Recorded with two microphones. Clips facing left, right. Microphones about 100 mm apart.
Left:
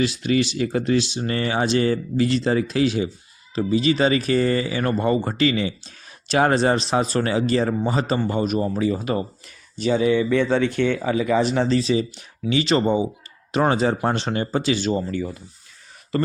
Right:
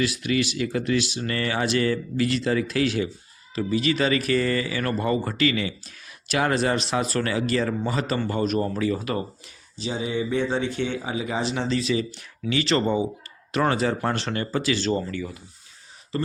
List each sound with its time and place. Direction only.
0.0 s speech: 30° left (ahead or behind)
9.7 s speech: 60° left (ahead or behind); by 11.8 s 45° left (ahead or behind)
11.8 s speech: 30° left (ahead or behind)
15.1 s speech: 40° left (ahead or behind)